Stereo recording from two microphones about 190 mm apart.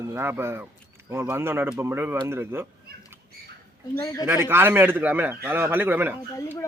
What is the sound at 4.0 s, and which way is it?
Speech, 20° left (ahead or behind).